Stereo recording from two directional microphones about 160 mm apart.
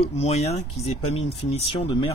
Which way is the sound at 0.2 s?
40° left (ahead or behind).